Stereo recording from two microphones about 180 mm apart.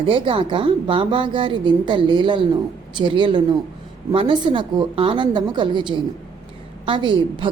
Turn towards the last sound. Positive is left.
turn(degrees=-25)  # may be behind; listen again after turning